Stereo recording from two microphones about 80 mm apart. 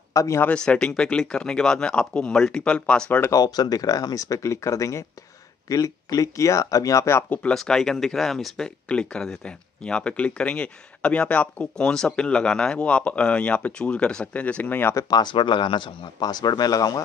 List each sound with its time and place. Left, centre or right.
0.1 s speech: left
0.4 s speech: centre
3.3 s speech: left
7.5 s speech: centre; by 15.0 s left
15.0 s speech: left
16.2 s speech: left